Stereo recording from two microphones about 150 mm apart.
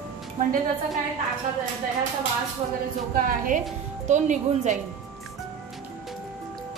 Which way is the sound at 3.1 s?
65° right (ahead or behind).